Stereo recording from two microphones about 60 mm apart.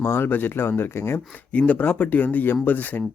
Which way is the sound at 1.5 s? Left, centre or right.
Left.